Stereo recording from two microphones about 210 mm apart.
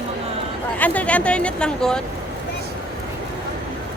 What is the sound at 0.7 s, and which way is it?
Speech, 5° left (ahead or behind).